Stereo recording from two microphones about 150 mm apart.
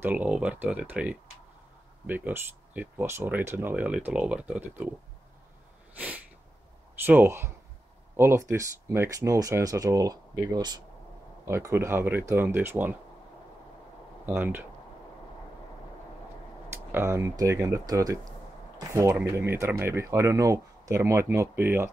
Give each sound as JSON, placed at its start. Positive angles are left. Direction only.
{"t": 0.0, "sound": "speech", "side_deg": -10}
{"t": 2.0, "sound": "speech", "side_deg": -15}
{"t": 5.9, "sound": "a sound", "side_deg": -10}
{"t": 7.1, "sound": "speech", "side_deg": -15}
{"t": 14.2, "sound": "speech", "side_deg": -15}
{"t": 16.9, "sound": "speech", "side_deg": -15}
{"t": 19.3, "sound": "speech", "side_deg": -15}